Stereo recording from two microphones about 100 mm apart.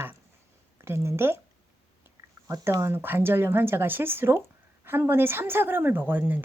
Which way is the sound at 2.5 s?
30° right (ahead or behind).